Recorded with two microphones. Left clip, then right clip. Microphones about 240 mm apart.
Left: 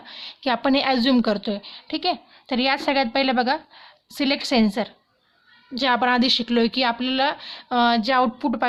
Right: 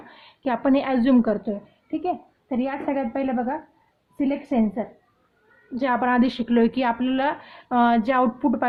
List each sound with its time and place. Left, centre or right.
0.1 s a woman's voice: left
5.7 s a woman's voice: left